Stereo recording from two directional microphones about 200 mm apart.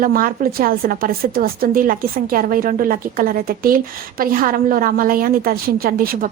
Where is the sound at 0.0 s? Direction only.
45° right (ahead or behind).